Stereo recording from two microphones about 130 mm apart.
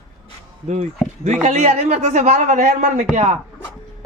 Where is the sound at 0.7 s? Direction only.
55° right (ahead or behind).